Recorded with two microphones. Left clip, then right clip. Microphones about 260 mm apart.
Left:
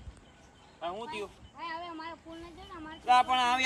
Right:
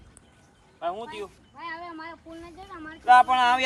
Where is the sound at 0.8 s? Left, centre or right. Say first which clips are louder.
Right 5 dB; centre.